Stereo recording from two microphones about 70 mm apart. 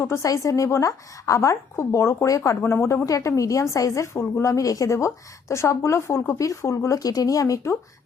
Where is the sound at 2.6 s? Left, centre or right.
Left.